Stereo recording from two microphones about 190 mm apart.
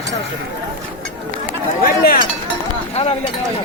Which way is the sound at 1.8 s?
50° left (ahead or behind).